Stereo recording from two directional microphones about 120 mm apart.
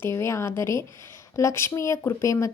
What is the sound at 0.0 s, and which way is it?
Speech, 20° left (ahead or behind).